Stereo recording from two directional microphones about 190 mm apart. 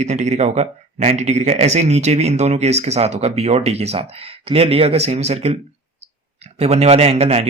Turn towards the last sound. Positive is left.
turn(degrees=-35)  # may be behind; listen again after turning